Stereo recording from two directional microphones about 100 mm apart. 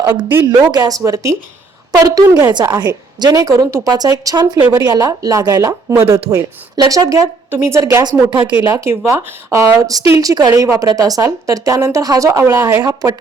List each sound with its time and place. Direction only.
0.1 s speech: 20° right (ahead or behind)
0.4 s a woman's voice: 40° right (ahead or behind)
5.9 s speech: 25° right (ahead or behind)
6.7 s speech: 40° right (ahead or behind)
7.5 s speech: 25° right (ahead or behind)
8.3 s speech: 55° right (ahead or behind)
8.7 s speech: 30° right (ahead or behind)